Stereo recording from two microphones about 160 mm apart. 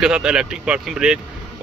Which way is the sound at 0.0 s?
5° right (ahead or behind).